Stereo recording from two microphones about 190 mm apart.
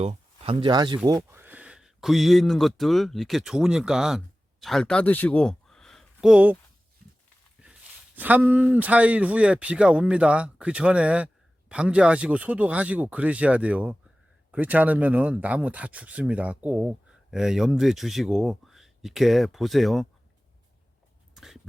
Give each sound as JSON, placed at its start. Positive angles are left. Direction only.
{"t": 0.0, "sound": "speech", "side_deg": -30}
{"t": 7.6, "sound": "speech", "side_deg": -10}
{"t": 21.3, "sound": "a sound", "side_deg": 0}